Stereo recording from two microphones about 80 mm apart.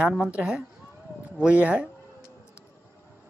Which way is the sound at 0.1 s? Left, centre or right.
Centre.